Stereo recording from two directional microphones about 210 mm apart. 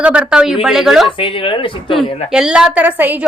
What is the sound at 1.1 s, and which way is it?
Speech, 25° left (ahead or behind).